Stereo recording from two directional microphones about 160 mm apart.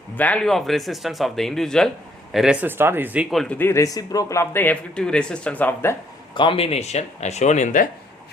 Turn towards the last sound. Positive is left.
turn(degrees=50)  # may be behind; listen again after turning